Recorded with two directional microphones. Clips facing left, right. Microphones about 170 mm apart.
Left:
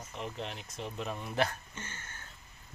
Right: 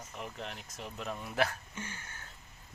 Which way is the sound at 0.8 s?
Centre (ahead or behind).